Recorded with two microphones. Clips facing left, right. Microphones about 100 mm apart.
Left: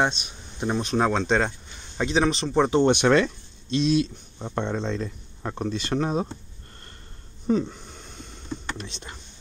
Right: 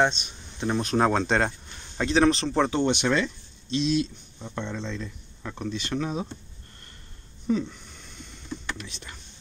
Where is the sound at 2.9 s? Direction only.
55° left (ahead or behind).